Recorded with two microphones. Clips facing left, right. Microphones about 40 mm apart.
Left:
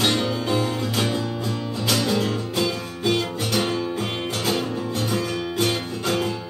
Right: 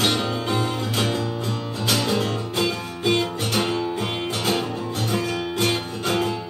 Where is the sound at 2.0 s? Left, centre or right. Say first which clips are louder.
Even; centre.